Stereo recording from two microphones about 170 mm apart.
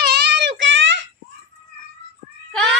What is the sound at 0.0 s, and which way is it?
Child singing, 75° right (ahead or behind).